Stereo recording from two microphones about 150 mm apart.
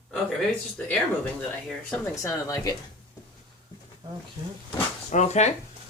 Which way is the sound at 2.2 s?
20° left (ahead or behind).